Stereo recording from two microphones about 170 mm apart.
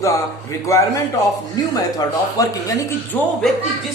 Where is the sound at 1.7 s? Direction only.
20° left (ahead or behind).